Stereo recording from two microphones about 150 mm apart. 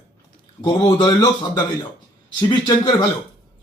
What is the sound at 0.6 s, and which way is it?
A man's voice, 35° left (ahead or behind).